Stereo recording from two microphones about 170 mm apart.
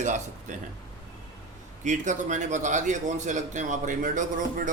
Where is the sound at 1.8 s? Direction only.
45° right (ahead or behind).